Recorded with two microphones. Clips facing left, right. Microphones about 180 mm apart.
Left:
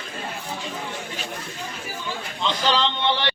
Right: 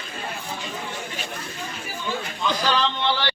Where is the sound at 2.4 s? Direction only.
25° left (ahead or behind).